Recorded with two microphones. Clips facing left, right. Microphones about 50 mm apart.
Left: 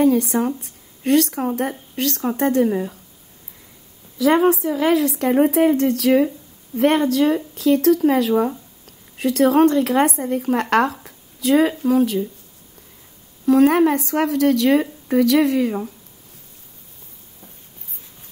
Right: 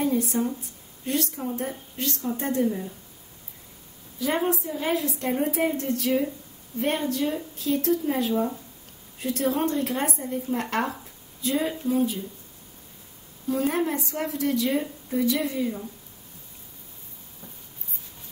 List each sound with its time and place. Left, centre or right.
0.0 s speech: left
4.2 s speech: left
13.5 s a woman's voice: left